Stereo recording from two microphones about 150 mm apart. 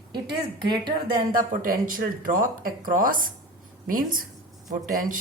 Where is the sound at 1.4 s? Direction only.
70° right (ahead or behind).